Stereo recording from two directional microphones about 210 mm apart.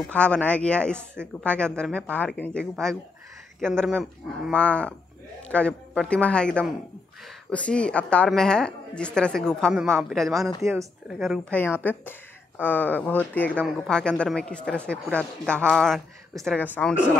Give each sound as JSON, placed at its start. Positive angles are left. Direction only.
{"t": 0.1, "sound": "a woman's voice", "side_deg": 5}
{"t": 0.9, "sound": "a woman's voice", "side_deg": -10}
{"t": 1.4, "sound": "a woman's voice", "side_deg": 5}
{"t": 10.6, "sound": "a woman's voice", "side_deg": -15}
{"t": 11.1, "sound": "a woman's voice", "side_deg": 0}